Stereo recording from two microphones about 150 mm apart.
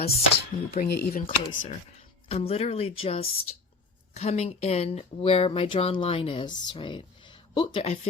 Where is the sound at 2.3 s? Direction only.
40° left (ahead or behind).